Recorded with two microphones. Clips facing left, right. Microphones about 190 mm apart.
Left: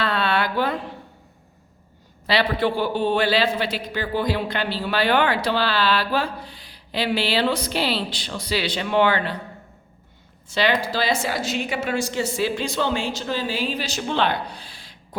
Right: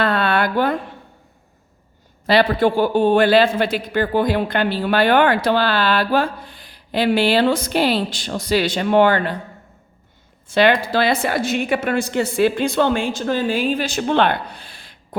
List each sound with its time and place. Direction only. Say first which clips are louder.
0.0 s music: right 4 dB; 50° right (ahead or behind)
2.2 s a man's voice: right 6 dB; 45° right (ahead or behind)
10.5 s a woman's voice: right 6 dB; 55° right (ahead or behind)